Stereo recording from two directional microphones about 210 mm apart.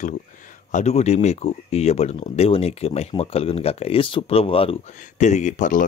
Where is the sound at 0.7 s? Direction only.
35° left (ahead or behind).